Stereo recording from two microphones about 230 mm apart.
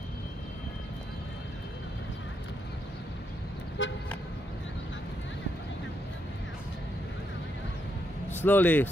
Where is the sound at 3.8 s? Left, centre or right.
Left.